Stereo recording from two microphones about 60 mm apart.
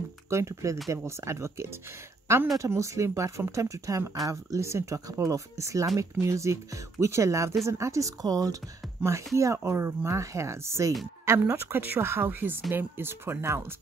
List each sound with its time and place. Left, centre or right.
0.3 s speech: right
2.7 s speech: right
9.0 s speech: right